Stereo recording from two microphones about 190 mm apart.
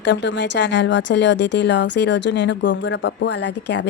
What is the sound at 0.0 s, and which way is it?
A woman's voice, 70° left (ahead or behind).